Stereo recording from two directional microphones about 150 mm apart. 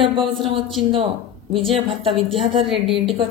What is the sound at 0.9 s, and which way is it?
A woman's voice, 35° right (ahead or behind).